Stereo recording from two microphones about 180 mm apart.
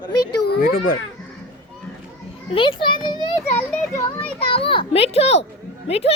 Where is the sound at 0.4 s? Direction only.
60° left (ahead or behind).